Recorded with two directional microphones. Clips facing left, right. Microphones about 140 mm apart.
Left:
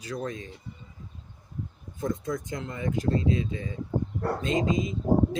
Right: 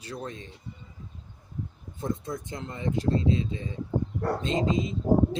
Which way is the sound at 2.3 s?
30° right (ahead or behind).